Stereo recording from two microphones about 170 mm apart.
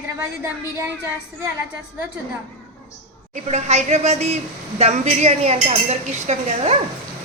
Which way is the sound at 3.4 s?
40° right (ahead or behind).